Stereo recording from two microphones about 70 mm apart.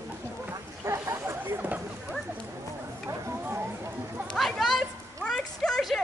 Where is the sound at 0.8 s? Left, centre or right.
Right.